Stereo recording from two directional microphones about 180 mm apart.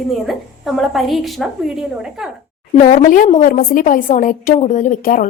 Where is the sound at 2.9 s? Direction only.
50° left (ahead or behind).